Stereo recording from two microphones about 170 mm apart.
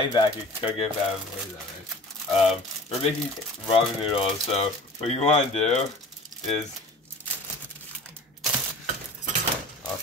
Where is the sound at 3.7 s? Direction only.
30° left (ahead or behind).